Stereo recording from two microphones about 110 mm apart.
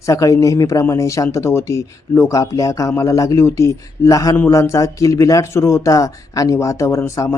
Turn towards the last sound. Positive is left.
turn(degrees=25)  # may be behind; listen again after turning